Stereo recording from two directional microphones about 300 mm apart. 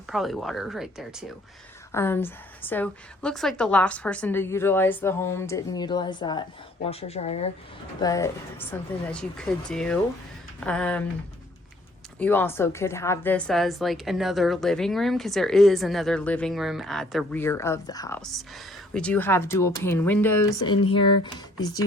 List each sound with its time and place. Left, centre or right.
0.1 s a woman's voice: centre
12.2 s a woman's voice: centre